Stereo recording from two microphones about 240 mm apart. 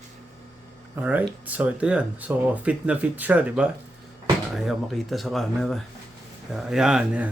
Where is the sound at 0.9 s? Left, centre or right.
Centre.